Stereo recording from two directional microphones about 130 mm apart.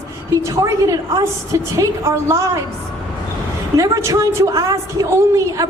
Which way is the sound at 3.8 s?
25° right (ahead or behind).